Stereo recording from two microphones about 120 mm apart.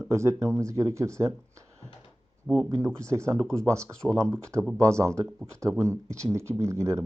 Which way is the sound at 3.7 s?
25° right (ahead or behind).